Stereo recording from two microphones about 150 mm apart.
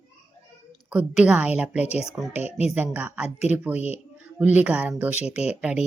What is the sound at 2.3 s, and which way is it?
Speech, 45° left (ahead or behind).